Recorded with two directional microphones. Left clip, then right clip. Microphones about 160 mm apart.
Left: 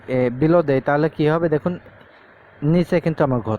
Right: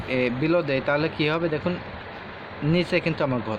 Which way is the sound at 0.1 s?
65° left (ahead or behind).